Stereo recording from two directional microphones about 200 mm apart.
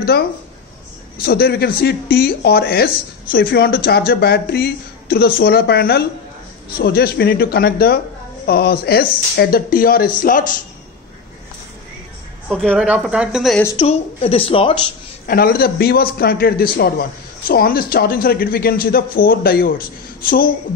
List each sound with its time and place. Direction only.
1.2 s speech: 50° left (ahead or behind)
12.4 s a woman's voice: centre (ahead or behind)
13.7 s a woman's voice: 30° left (ahead or behind)
15.2 s speech: 50° left (ahead or behind)